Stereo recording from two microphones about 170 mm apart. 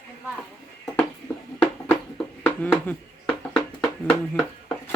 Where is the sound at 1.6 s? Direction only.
10° left (ahead or behind).